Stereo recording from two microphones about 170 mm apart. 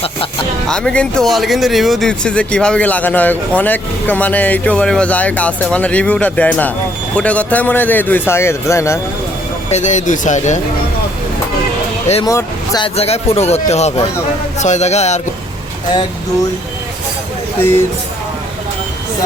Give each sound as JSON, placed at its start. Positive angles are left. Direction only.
{"t": 0.7, "sound": "speech", "side_deg": 5}
{"t": 9.6, "sound": "speech", "side_deg": 45}
{"t": 12.2, "sound": "speech", "side_deg": 20}
{"t": 12.8, "sound": "speech", "side_deg": 35}
{"t": 17.6, "sound": "speech", "side_deg": 15}